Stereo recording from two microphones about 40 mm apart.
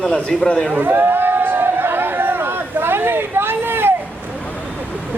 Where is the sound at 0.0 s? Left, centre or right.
Centre.